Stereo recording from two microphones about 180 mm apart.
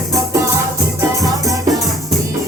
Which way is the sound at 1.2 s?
20° right (ahead or behind).